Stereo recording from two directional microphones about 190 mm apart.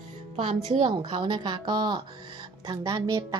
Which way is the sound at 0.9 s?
20° right (ahead or behind).